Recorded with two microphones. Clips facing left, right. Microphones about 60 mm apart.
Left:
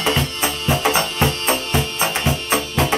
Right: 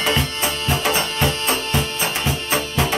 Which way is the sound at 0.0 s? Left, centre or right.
Left.